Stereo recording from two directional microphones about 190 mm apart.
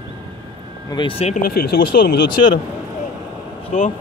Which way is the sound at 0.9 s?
25° left (ahead or behind).